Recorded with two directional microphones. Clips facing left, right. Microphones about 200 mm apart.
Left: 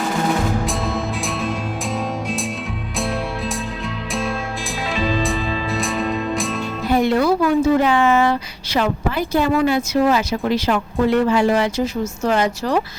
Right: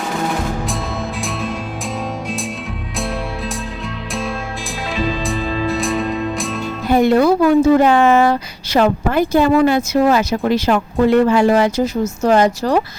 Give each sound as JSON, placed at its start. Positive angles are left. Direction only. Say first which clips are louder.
{"t": 4.1, "sound": "music", "louder": "even", "side_deg": 0}
{"t": 6.9, "sound": "a woman's voice", "louder": "right 4 dB", "side_deg": -45}